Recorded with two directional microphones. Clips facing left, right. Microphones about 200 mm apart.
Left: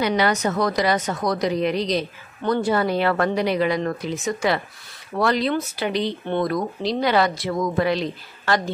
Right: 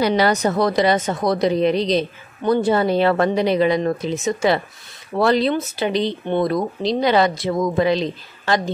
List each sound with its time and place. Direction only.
0.0 s speech: 35° right (ahead or behind)